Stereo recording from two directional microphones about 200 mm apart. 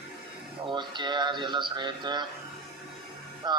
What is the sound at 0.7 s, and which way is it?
Speech, 25° right (ahead or behind).